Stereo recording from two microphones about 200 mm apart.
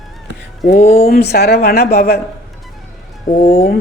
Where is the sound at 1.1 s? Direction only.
55° left (ahead or behind).